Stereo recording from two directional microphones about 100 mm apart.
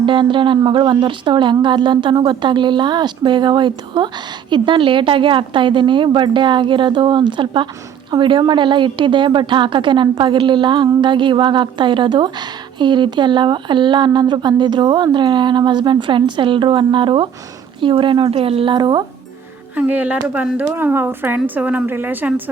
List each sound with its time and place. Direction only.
0.0 s a woman's voice: 55° right (ahead or behind)
19.7 s speech: 15° right (ahead or behind)